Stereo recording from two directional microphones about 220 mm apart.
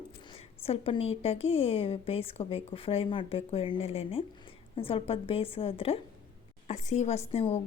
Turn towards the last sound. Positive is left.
turn(degrees=25)  # may be behind; listen again after turning